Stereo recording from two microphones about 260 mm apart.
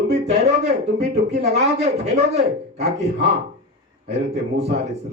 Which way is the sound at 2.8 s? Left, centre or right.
Right.